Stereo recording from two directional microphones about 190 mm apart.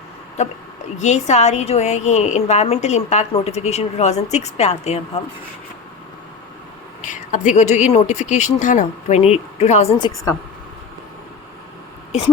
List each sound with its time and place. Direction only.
0.4 s a woman's voice: 35° left (ahead or behind)
7.0 s a woman's voice: 40° left (ahead or behind)
12.1 s a woman's voice: 35° left (ahead or behind)